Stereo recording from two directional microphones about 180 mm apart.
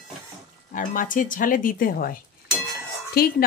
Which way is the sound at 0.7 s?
45° left (ahead or behind).